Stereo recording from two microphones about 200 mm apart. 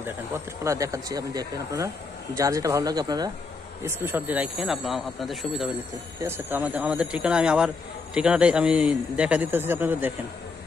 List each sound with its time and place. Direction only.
0.7 s speech: 15° right (ahead or behind); by 5.7 s centre (ahead or behind)
6.2 s speech: 10° right (ahead or behind)